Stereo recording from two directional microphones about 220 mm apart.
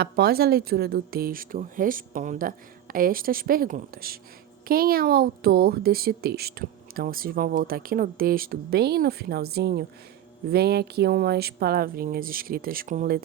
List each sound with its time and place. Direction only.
0.0 s speech: 45° right (ahead or behind)